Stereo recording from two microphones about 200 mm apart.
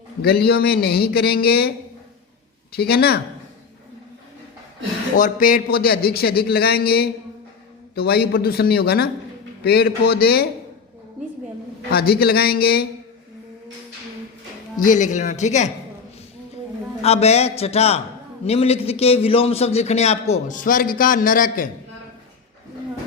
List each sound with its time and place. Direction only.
0.2 s a man's voice: 50° left (ahead or behind)
2.7 s a man's voice: 50° left (ahead or behind)
5.1 s a man's voice: 45° left (ahead or behind)
11.9 s a man's voice: 50° left (ahead or behind)
14.8 s a man's voice: 40° left (ahead or behind)
17.0 s a man's voice: 30° left (ahead or behind)